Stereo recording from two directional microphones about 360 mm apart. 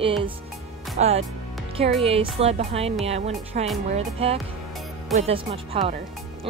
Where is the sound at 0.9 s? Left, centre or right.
Centre.